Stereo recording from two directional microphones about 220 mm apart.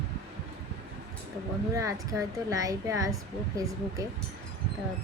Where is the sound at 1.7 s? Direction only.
15° right (ahead or behind).